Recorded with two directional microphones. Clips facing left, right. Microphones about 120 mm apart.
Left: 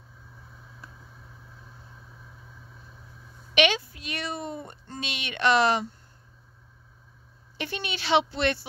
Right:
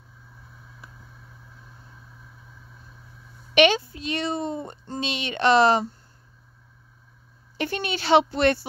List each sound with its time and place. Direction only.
3.5 s a woman's voice: 35° right (ahead or behind)
7.5 s speech: 45° right (ahead or behind)